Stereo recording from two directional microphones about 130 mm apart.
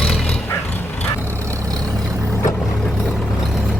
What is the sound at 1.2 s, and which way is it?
Vehicle, 20° right (ahead or behind).